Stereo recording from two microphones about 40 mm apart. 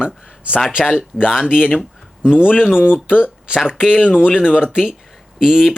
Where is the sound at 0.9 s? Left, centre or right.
Centre.